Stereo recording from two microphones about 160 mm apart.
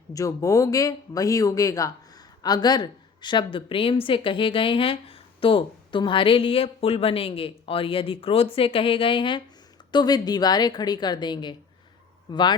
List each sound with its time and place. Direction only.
0.1 s speech: 20° left (ahead or behind)